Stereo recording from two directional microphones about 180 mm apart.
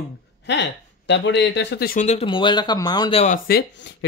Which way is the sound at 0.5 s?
75° left (ahead or behind).